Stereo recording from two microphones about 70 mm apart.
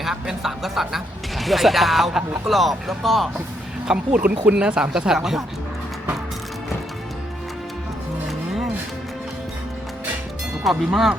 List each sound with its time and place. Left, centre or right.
0.0 s speech: centre
3.8 s speech: centre
10.6 s speech: centre